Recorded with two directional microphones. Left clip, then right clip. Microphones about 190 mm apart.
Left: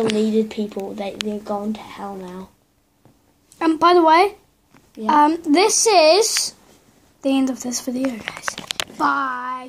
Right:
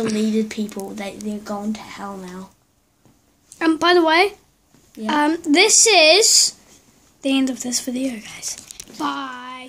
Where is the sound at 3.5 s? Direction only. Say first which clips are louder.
Left 1 dB; 10° right (ahead or behind).